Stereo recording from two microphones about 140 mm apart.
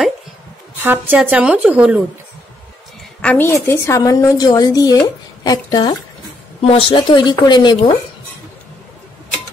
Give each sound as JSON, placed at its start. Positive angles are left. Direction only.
{"t": 0.8, "sound": "a woman's voice", "side_deg": -10}
{"t": 3.2, "sound": "a woman's voice", "side_deg": 10}
{"t": 6.6, "sound": "a woman's voice", "side_deg": 40}